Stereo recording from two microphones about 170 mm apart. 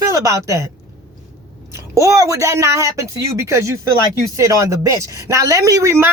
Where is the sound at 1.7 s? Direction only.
20° right (ahead or behind).